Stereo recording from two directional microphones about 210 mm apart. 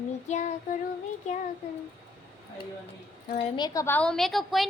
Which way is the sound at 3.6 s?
15° left (ahead or behind).